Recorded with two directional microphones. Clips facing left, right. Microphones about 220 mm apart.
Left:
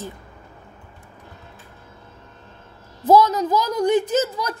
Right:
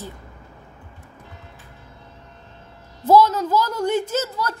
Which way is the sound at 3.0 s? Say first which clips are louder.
Even; 15° left (ahead or behind).